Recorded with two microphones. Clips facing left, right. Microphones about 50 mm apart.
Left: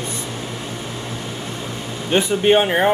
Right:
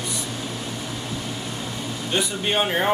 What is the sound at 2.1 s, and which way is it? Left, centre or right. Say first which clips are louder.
Speech: left 9 dB; left.